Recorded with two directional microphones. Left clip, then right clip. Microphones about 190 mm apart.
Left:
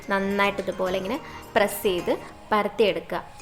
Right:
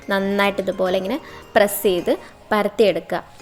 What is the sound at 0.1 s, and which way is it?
A woman's voice, 20° right (ahead or behind).